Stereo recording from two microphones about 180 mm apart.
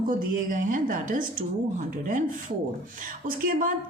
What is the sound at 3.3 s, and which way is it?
Speech, 50° right (ahead or behind).